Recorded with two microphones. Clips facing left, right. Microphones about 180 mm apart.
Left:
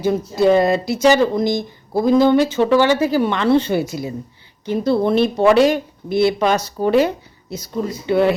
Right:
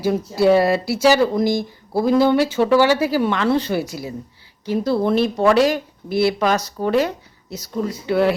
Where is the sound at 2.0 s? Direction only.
10° right (ahead or behind).